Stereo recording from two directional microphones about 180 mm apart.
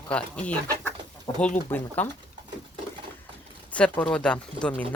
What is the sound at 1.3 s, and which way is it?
Speech, 25° left (ahead or behind).